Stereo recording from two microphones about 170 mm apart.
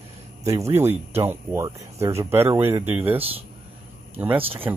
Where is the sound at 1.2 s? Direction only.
15° right (ahead or behind).